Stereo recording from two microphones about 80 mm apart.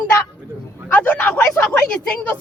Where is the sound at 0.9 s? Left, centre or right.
Left.